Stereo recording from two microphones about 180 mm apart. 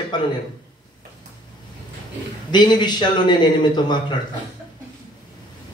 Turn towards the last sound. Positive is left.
turn(degrees=25)  # may be behind; listen again after turning